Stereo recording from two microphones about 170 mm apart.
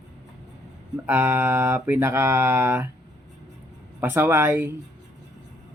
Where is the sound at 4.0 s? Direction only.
15° right (ahead or behind).